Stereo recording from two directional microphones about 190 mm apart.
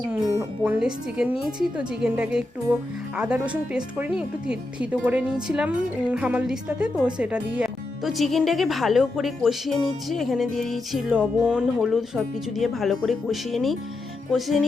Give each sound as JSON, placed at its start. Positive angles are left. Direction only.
{"t": 0.1, "sound": "speech", "side_deg": -15}
{"t": 0.6, "sound": "speech", "side_deg": -5}